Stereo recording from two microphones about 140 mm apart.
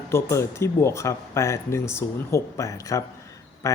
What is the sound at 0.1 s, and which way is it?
Speech, 20° left (ahead or behind).